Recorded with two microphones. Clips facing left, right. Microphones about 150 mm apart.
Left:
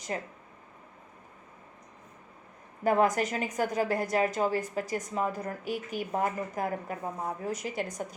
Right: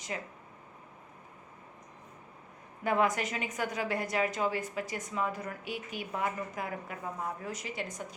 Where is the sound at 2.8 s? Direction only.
40° left (ahead or behind).